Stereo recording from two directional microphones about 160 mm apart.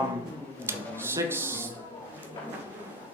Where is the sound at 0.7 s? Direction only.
15° right (ahead or behind).